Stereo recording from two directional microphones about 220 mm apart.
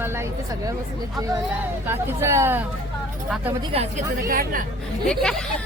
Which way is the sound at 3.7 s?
25° right (ahead or behind).